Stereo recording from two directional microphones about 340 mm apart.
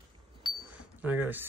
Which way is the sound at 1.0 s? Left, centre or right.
Centre.